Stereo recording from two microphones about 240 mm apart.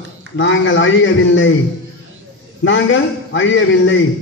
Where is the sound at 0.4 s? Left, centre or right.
Left.